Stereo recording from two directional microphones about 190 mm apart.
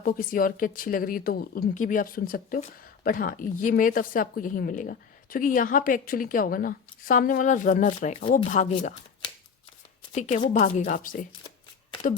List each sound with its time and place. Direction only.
0.0 s speech: 45° left (ahead or behind)
10.2 s speech: 40° left (ahead or behind)